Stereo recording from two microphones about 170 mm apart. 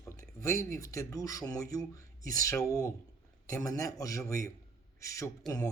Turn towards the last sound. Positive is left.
turn(degrees=5)  # may be behind; listen again after turning